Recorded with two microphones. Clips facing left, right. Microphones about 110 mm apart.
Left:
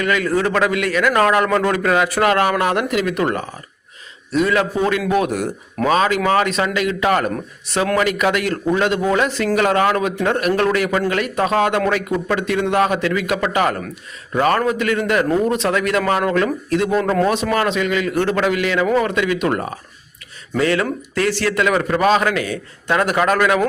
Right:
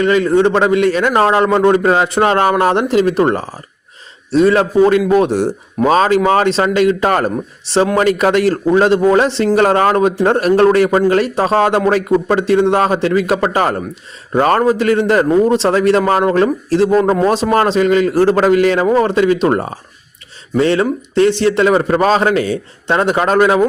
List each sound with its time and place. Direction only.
0.0 s a man's voice: 30° right (ahead or behind)